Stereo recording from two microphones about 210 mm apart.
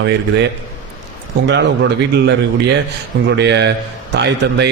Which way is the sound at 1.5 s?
55° right (ahead or behind).